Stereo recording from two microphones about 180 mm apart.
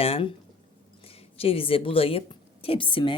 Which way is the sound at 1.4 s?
30° left (ahead or behind).